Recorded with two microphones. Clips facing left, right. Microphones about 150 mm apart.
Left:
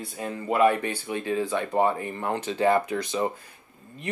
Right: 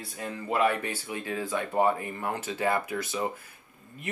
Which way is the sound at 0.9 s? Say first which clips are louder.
Left 5 dB; 20° left (ahead or behind).